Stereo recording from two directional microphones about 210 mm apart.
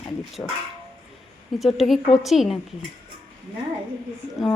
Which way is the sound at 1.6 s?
Centre (ahead or behind).